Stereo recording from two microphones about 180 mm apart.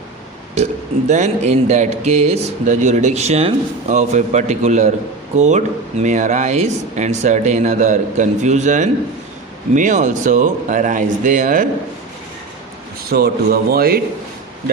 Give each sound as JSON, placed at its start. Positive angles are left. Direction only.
{"t": 0.5, "sound": "speech", "side_deg": -40}
{"t": 13.1, "sound": "speech", "side_deg": -60}